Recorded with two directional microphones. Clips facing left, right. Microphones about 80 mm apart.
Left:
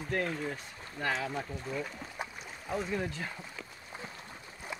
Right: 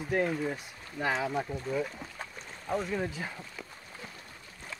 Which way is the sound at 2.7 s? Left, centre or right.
Centre.